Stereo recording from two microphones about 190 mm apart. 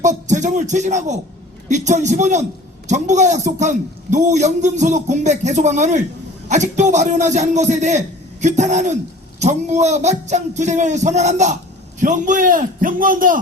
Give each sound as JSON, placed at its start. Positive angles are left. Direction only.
{"t": 0.0, "sound": "a man's voice", "side_deg": -40}